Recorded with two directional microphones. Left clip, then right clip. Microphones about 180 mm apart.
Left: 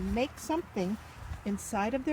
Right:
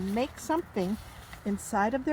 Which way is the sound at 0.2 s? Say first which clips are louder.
Right 2 dB; 20° right (ahead or behind).